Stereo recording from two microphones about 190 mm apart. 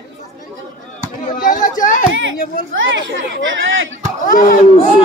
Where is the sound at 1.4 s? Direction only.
45° left (ahead or behind).